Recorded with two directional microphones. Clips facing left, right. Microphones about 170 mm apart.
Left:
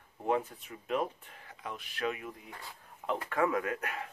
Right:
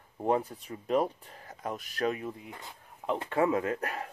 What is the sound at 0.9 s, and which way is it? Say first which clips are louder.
Speech: right 5 dB; 35° right (ahead or behind).